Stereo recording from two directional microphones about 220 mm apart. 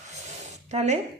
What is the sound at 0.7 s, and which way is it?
Speech, 30° right (ahead or behind).